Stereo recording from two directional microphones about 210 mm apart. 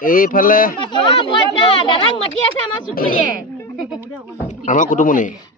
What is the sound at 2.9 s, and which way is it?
Speech, 45° left (ahead or behind).